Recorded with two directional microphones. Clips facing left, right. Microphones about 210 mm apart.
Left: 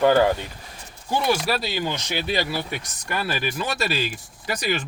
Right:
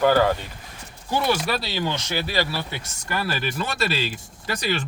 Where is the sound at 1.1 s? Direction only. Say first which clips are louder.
Left 1 dB; 15° left (ahead or behind).